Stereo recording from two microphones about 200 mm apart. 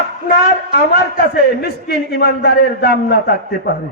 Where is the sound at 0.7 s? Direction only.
50° left (ahead or behind).